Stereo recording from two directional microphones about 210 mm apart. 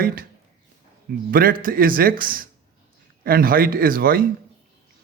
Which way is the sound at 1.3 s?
45° right (ahead or behind).